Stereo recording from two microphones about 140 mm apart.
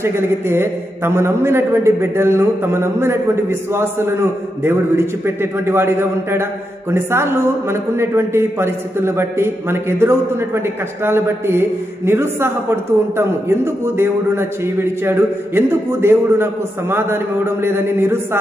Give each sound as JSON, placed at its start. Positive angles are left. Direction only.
{"t": 0.0, "sound": "a man's voice", "side_deg": -15}